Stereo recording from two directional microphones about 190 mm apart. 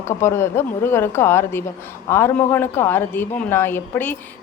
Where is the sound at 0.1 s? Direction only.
15° left (ahead or behind).